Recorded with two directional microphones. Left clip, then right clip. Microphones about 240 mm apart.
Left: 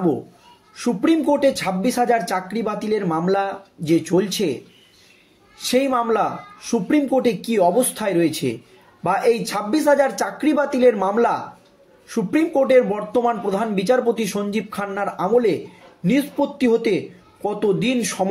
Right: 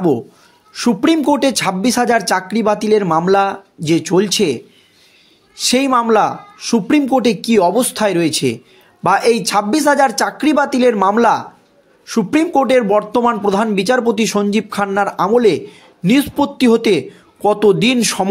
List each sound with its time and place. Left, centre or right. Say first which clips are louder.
0.7 s speech: right 5 dB; right
5.6 s speech: right 5 dB; right